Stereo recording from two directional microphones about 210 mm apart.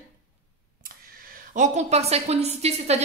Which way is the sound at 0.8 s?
45° right (ahead or behind).